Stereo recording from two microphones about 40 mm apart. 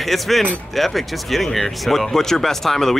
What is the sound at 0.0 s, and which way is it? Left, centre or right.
Speech, centre.